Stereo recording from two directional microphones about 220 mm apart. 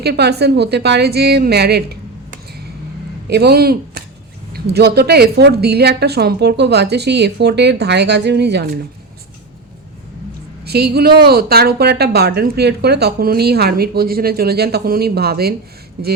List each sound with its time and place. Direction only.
0.0 s a woman's voice: 45° right (ahead or behind)
10.6 s a woman's voice: 45° right (ahead or behind)